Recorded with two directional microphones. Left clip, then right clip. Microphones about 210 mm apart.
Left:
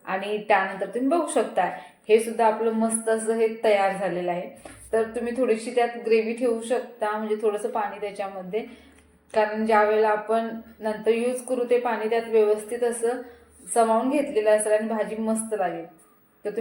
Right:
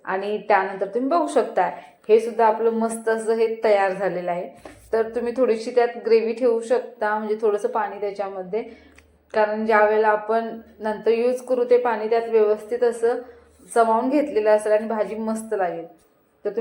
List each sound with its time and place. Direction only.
0.0 s a woman's voice: 15° right (ahead or behind)